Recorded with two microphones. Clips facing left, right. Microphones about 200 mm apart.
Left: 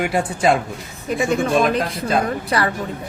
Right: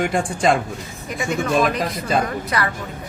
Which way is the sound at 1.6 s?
Centre (ahead or behind).